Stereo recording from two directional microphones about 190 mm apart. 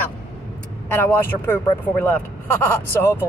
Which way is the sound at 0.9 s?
10° left (ahead or behind).